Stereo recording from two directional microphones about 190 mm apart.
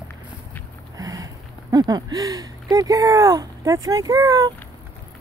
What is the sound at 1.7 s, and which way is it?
Speech, 20° right (ahead or behind).